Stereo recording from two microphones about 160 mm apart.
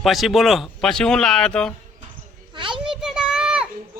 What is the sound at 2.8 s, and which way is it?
Children playing, 5° right (ahead or behind).